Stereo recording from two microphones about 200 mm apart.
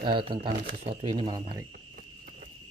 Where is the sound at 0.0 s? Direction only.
25° right (ahead or behind).